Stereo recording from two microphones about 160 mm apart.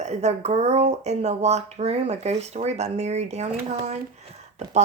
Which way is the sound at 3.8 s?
45° right (ahead or behind).